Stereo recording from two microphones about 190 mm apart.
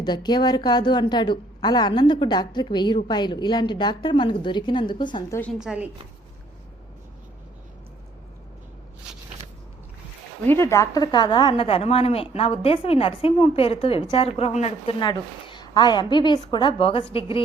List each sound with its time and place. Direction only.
0.0 s a woman's voice: 20° left (ahead or behind)
5.4 s a woman's voice: centre (ahead or behind)
10.4 s a woman's voice: 10° left (ahead or behind); by 17.2 s 30° left (ahead or behind)